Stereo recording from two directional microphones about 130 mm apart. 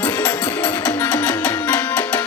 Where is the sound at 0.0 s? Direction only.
15° left (ahead or behind).